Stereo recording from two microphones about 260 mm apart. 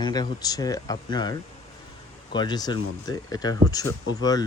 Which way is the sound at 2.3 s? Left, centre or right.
Centre.